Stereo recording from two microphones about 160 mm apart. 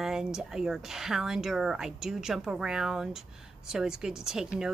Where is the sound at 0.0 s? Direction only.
5° right (ahead or behind).